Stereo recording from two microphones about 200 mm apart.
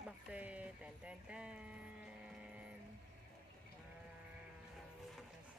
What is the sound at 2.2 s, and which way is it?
Printer, 5° right (ahead or behind).